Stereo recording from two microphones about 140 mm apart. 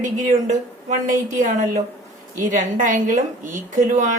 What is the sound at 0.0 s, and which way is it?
A woman's voice, 60° right (ahead or behind).